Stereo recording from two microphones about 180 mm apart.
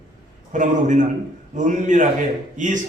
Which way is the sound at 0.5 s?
45° right (ahead or behind).